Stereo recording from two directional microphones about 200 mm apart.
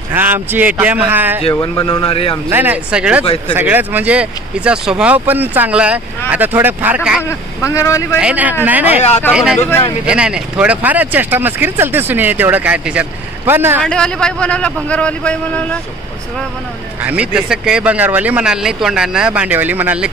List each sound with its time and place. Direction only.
0.1 s speech: 10° right (ahead or behind)
1.5 s a man's voice: 25° left (ahead or behind)
2.5 s speech: 10° right (ahead or behind)
7.2 s speech: 15° left (ahead or behind)
8.2 s speech: 5° right (ahead or behind)
9.6 s speech: 10° left (ahead or behind)
10.0 s speech: 5° right (ahead or behind)
13.8 s speech: 5° left (ahead or behind)
17.0 s speech: 5° right (ahead or behind)